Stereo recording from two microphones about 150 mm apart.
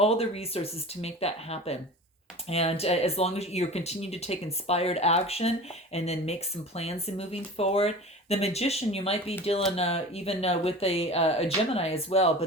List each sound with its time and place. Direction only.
0.0 s speech: 40° left (ahead or behind)